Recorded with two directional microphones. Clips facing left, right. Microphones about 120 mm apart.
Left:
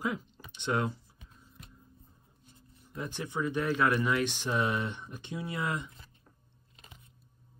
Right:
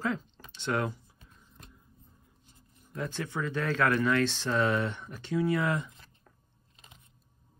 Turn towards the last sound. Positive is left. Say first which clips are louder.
# right 7 dB
turn(degrees=20)  # may be behind; listen again after turning